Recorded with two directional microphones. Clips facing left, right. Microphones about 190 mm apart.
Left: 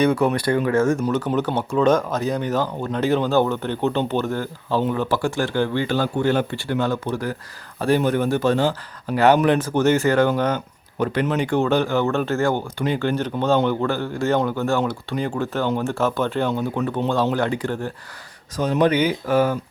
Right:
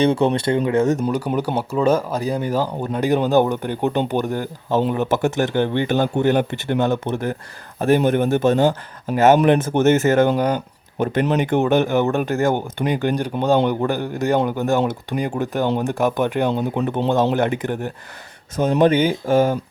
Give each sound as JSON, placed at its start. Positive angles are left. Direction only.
{"t": 0.0, "sound": "speech", "side_deg": -25}
{"t": 18.9, "sound": "speech", "side_deg": -50}
{"t": 19.3, "sound": "speech", "side_deg": -25}